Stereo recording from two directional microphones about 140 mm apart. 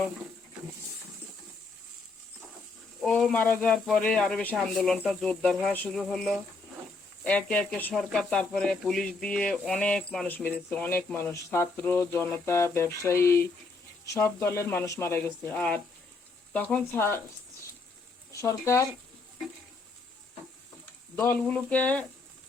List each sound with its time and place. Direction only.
3.0 s speech: 5° left (ahead or behind)
18.3 s speech: 20° left (ahead or behind)
21.2 s speech: 15° left (ahead or behind)